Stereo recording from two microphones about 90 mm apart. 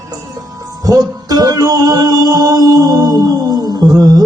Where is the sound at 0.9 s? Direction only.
45° right (ahead or behind).